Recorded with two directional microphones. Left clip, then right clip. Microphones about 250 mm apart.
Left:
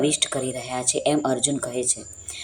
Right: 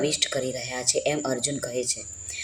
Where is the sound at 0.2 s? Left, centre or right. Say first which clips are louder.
Left 1 dB; centre.